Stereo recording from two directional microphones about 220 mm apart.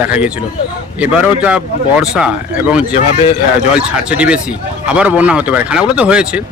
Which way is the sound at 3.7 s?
5° right (ahead or behind).